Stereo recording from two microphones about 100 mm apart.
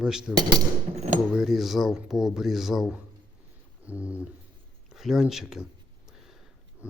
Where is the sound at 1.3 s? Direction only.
5° right (ahead or behind).